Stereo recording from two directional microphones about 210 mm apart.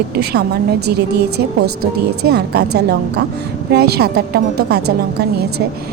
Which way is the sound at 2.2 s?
50° right (ahead or behind).